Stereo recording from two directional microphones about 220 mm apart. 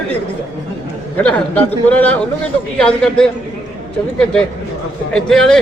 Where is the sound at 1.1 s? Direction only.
5° left (ahead or behind).